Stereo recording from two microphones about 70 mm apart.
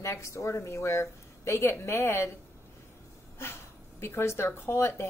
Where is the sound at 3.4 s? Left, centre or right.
Left.